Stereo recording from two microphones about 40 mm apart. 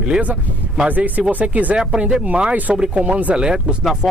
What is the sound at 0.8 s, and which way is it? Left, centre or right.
Speech, right.